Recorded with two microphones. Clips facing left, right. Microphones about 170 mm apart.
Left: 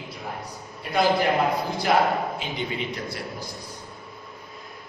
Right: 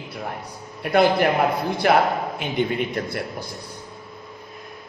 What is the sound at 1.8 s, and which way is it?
A man's voice, 60° right (ahead or behind).